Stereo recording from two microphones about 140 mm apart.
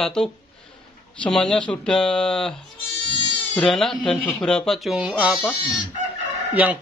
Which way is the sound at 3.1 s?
35° right (ahead or behind).